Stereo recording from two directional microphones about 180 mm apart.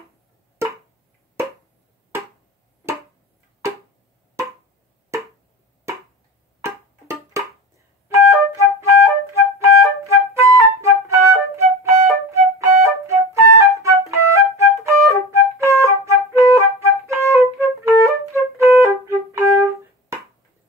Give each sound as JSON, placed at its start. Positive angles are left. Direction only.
{"t": 6.6, "sound": "music", "side_deg": -15}
{"t": 8.1, "sound": "flute", "side_deg": -15}